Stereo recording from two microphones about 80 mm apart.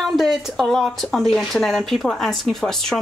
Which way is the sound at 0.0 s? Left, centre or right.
Centre.